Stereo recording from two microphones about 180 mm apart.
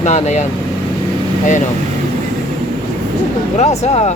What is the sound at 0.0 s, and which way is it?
Speech, 40° left (ahead or behind).